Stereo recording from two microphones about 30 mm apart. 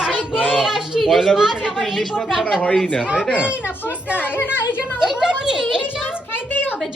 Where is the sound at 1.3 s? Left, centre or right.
Centre.